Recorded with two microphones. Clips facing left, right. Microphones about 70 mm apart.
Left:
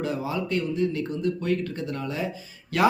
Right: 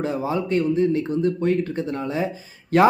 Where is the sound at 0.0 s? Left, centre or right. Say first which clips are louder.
Right 4 dB; right.